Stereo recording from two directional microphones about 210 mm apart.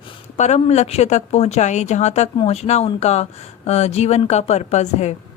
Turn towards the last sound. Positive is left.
turn(degrees=30)  # may be behind; listen again after turning